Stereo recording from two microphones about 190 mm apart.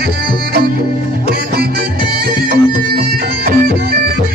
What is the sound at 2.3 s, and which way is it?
Music, 50° right (ahead or behind).